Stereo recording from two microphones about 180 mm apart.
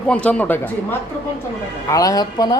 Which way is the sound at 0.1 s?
5° left (ahead or behind).